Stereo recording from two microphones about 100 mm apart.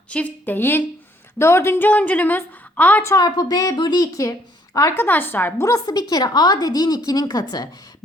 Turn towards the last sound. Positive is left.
turn(degrees=40)  # may be behind; listen again after turning